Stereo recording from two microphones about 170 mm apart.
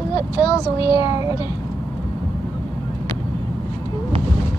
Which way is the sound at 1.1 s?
15° right (ahead or behind).